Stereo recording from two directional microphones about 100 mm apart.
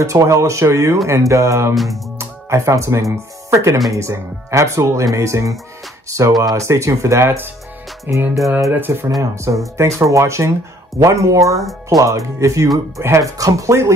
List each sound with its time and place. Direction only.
0.0 s speech: 30° right (ahead or behind)